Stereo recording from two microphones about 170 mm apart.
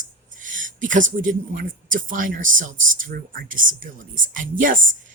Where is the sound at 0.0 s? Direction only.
50° right (ahead or behind).